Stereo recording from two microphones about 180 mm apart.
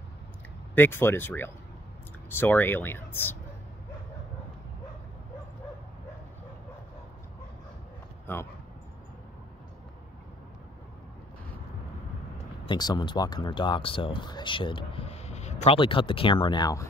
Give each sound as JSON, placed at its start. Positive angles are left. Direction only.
{"t": 0.7, "sound": "speech", "side_deg": 10}
{"t": 8.3, "sound": "speech", "side_deg": 10}
{"t": 12.6, "sound": "speech", "side_deg": 25}